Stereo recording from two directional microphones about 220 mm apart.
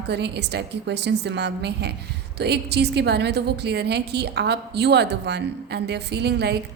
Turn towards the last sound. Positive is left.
turn(degrees=-50)  # may be behind; listen again after turning